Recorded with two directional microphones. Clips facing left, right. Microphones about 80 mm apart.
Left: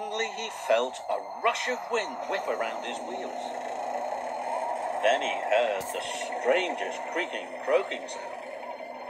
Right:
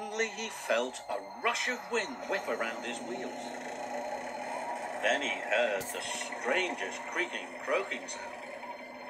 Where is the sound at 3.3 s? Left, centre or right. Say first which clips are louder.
Left 6 dB; left.